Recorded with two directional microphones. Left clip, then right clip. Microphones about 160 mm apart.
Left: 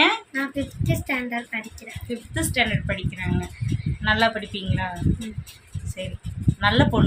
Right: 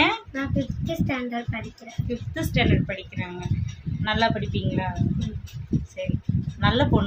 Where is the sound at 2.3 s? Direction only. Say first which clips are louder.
Left 2 dB; centre (ahead or behind).